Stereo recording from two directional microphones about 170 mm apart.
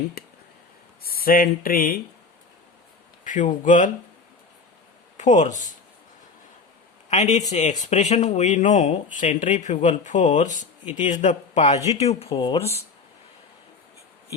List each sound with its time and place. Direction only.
1.0 s speech: 60° left (ahead or behind)
3.2 s speech: 45° left (ahead or behind)
5.1 s speech: 45° left (ahead or behind)
7.1 s speech: 40° left (ahead or behind)
12.3 s speech: 25° left (ahead or behind)